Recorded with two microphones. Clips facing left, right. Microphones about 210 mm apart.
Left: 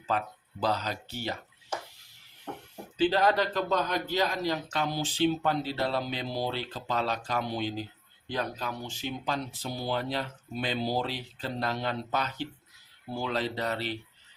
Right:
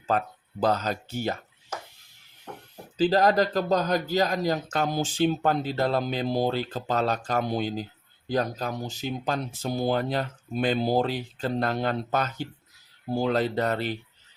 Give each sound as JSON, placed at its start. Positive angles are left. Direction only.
{"t": 0.1, "sound": "speech", "side_deg": -45}
{"t": 3.0, "sound": "speech", "side_deg": -40}